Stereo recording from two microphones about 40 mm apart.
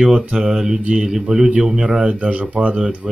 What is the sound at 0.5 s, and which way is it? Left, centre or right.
Speech, centre.